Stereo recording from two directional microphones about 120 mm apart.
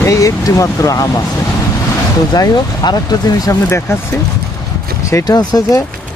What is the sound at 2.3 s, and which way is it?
Speech, 35° left (ahead or behind).